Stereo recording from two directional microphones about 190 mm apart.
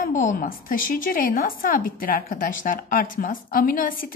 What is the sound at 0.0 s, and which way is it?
A woman's voice, 45° left (ahead or behind).